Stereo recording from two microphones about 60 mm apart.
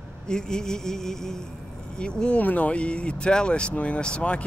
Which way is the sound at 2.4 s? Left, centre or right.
Left.